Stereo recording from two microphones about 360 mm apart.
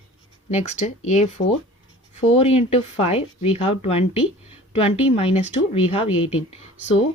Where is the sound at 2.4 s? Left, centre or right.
Centre.